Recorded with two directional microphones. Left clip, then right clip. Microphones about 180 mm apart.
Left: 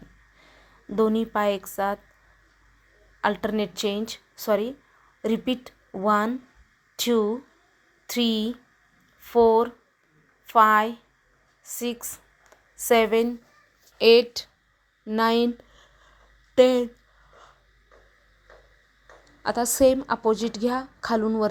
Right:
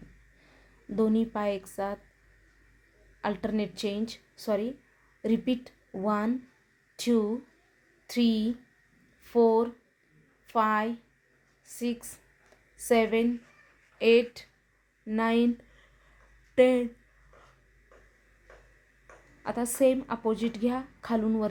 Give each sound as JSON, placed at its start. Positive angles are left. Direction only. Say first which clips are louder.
{"t": 0.9, "sound": "speech", "louder": "left 5 dB", "side_deg": 10}
{"t": 3.2, "sound": "speech", "louder": "left 7 dB", "side_deg": 10}
{"t": 14.0, "sound": "a woman's voice", "louder": "left 6 dB", "side_deg": 25}
{"t": 16.6, "sound": "a woman's voice", "louder": "left 4 dB", "side_deg": 20}
{"t": 19.4, "sound": "a woman's voice", "louder": "left 6 dB", "side_deg": 25}